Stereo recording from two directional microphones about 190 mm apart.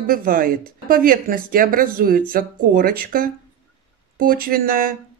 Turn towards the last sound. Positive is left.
turn(degrees=-50)  # may be behind; listen again after turning